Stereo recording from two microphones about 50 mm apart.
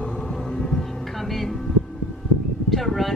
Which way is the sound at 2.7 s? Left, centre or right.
Centre.